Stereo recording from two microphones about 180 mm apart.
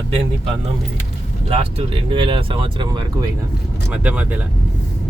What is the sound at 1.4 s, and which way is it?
Speech, 30° right (ahead or behind).